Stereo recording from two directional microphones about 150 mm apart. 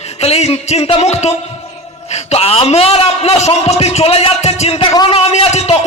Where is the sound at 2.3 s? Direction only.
40° left (ahead or behind).